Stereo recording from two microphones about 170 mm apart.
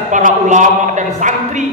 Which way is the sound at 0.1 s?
45° right (ahead or behind).